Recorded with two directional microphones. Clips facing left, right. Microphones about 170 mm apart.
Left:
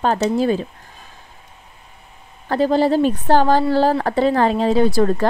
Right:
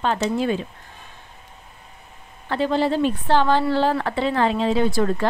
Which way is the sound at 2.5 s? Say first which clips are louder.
Left 5 dB; 40° left (ahead or behind).